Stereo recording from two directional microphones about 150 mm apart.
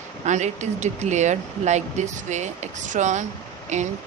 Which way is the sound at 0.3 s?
50° right (ahead or behind).